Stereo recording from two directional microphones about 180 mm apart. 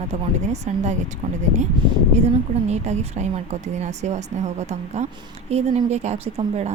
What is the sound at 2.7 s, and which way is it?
Speech, 40° right (ahead or behind).